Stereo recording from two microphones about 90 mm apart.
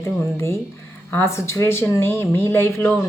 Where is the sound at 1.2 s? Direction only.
30° left (ahead or behind).